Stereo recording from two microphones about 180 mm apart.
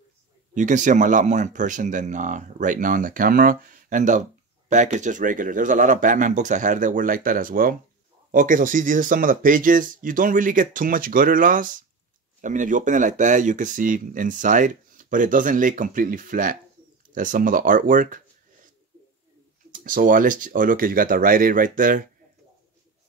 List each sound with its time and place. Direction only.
0.6 s speech: 45° right (ahead or behind)
19.7 s speech: 50° right (ahead or behind)